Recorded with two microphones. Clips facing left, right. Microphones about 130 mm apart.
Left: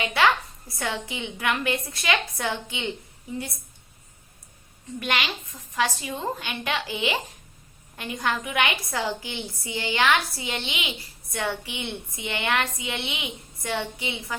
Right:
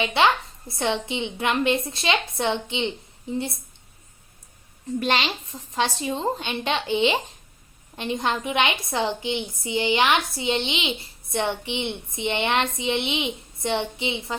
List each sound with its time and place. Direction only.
0.0 s a woman's voice: 25° right (ahead or behind)
4.9 s a woman's voice: 30° right (ahead or behind)